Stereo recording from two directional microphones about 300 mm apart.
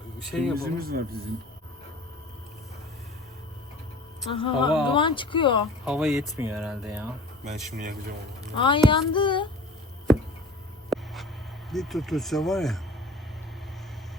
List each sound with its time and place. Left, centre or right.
0.3 s speech: centre
0.6 s a man's voice: right
4.3 s speech: centre
5.8 s speech: centre
8.5 s speech: centre
10.8 s a sound: centre
11.7 s speech: centre